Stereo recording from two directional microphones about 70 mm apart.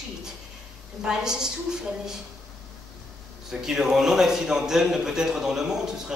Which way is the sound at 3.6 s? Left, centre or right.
Centre.